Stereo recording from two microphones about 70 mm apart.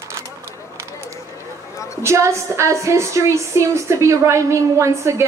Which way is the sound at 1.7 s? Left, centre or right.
Left.